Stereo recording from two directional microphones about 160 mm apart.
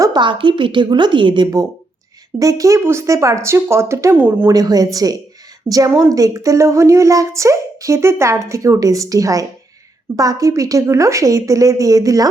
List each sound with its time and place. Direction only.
0.0 s a woman's voice: 30° right (ahead or behind)